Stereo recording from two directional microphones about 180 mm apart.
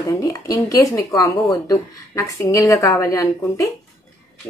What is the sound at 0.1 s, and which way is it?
A woman's voice, 20° left (ahead or behind).